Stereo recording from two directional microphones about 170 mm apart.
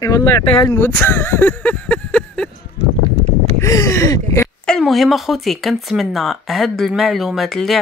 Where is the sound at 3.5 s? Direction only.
20° left (ahead or behind).